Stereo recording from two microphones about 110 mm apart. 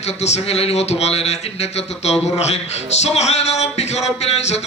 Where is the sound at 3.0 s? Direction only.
85° left.